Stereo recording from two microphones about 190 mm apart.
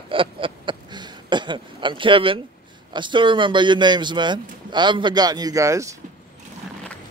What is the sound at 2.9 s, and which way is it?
A man's voice, 25° right (ahead or behind).